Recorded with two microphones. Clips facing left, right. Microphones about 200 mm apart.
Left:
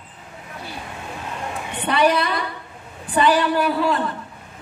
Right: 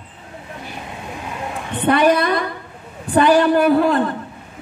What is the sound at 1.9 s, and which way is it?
A man's voice, 45° right (ahead or behind).